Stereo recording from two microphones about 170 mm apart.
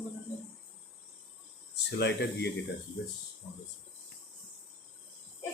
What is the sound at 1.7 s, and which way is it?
Speech, 85° left.